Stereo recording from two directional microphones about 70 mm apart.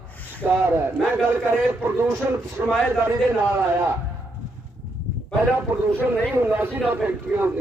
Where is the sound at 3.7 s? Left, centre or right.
Right.